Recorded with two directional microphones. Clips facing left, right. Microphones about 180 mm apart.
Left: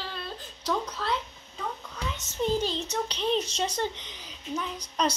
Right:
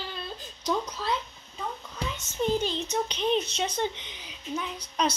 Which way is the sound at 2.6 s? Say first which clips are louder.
Right 1 dB; 35° left (ahead or behind).